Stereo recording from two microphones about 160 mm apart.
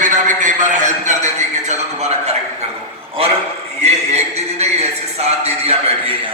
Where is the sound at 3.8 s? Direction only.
45° right (ahead or behind).